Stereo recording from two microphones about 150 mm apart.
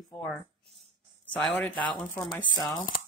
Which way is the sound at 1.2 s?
5° left (ahead or behind).